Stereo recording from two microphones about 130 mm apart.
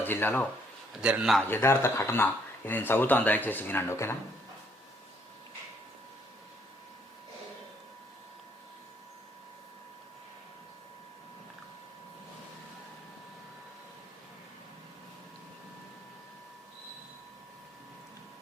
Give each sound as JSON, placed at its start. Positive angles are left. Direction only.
{"t": 0.0, "sound": "speech", "side_deg": 15}
{"t": 1.0, "sound": "a man's voice", "side_deg": -5}
{"t": 1.4, "sound": "speech", "side_deg": 15}